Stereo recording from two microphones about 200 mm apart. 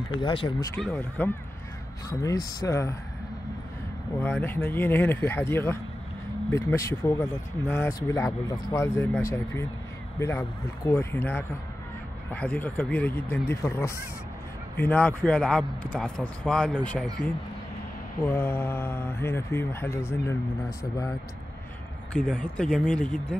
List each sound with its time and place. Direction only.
0.2 s speech: 25° left (ahead or behind)
0.7 s speech: 5° left (ahead or behind)
2.0 s speech: 15° left (ahead or behind)
4.2 s speech: 10° left (ahead or behind)
18.2 s speech: 15° left (ahead or behind)
22.1 s speech: 5° left (ahead or behind)